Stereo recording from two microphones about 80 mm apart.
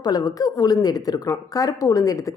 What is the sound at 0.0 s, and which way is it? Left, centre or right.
A woman's voice, left.